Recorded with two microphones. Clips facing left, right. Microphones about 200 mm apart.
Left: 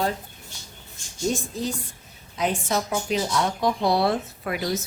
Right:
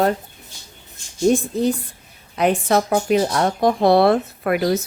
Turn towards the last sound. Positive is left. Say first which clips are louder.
# right 8 dB
turn(degrees=-60)  # may be behind; listen again after turning